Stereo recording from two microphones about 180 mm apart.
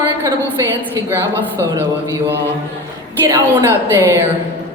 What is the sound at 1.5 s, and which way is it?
Speech, 20° right (ahead or behind).